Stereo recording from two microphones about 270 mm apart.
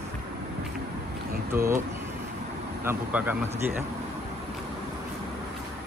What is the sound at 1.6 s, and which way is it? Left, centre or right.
Speech, right.